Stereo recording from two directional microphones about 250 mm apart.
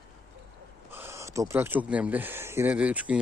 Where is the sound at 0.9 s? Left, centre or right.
Centre.